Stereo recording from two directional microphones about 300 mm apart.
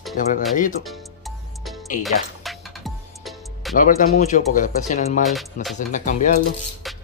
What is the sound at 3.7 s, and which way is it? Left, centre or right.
Speech, left.